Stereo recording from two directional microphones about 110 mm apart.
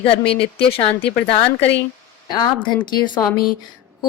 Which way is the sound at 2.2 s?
40° left (ahead or behind).